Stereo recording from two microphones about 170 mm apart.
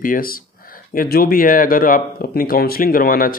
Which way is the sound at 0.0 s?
55° left (ahead or behind).